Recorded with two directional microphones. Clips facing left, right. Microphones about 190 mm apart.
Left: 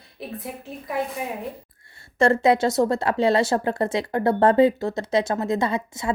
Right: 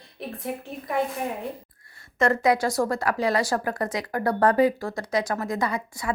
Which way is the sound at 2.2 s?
25° left (ahead or behind).